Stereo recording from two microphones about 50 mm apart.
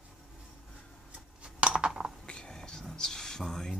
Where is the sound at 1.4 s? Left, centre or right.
Centre.